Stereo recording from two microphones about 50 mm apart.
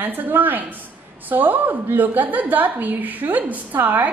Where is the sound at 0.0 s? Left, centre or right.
Right.